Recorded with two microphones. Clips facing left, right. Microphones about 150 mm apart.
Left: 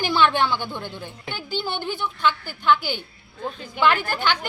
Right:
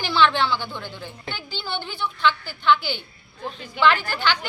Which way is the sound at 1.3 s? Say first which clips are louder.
Left 4 dB; 45° left (ahead or behind).